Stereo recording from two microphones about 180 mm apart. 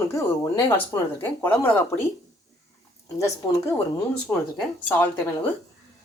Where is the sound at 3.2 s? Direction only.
15° left (ahead or behind).